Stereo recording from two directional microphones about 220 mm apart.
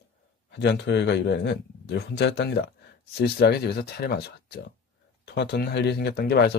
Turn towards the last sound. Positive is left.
turn(degrees=45)  # may be behind; listen again after turning